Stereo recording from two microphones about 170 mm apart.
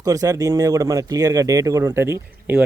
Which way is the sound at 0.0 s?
20° right (ahead or behind).